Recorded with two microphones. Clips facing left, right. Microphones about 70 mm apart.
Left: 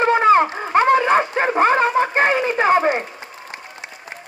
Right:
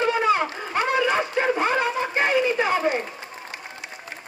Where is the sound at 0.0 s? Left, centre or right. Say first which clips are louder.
Left 7 dB; left.